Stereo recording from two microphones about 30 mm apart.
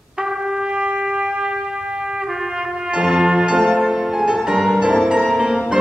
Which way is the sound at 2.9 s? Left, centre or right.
Right.